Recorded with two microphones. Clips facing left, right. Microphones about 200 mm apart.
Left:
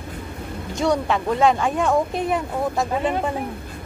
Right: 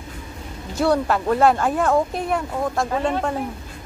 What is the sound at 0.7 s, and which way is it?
Speech, 5° right (ahead or behind).